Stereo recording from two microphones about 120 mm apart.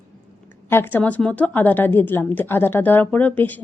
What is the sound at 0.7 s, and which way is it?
Speech, 15° left (ahead or behind).